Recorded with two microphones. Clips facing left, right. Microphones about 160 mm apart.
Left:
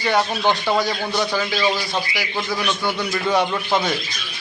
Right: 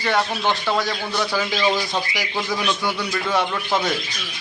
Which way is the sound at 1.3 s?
10° right (ahead or behind).